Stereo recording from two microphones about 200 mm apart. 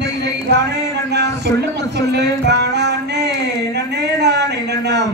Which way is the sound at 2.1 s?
55° right (ahead or behind).